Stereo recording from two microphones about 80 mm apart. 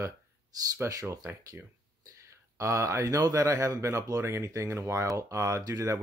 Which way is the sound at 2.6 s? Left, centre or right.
Right.